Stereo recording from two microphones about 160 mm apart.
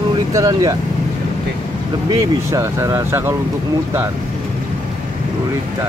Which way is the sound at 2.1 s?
20° right (ahead or behind).